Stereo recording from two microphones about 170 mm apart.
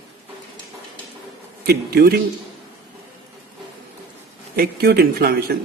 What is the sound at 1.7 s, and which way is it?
Speech, 65° right (ahead or behind).